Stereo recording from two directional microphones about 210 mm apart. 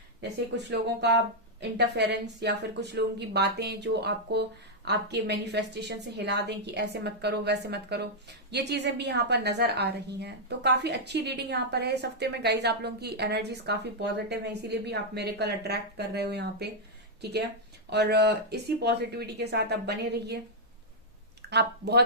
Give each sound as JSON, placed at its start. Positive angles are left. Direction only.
{"t": 0.2, "sound": "a woman's voice", "side_deg": -55}
{"t": 21.5, "sound": "a woman's voice", "side_deg": -50}